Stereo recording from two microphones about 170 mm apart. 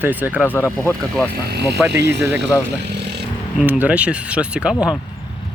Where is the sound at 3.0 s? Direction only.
80° right.